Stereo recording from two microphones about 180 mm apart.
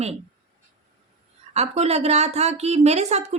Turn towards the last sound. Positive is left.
turn(degrees=-35)  # may be behind; listen again after turning